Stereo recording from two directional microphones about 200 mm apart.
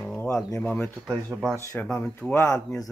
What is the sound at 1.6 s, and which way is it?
Speech, 15° left (ahead or behind).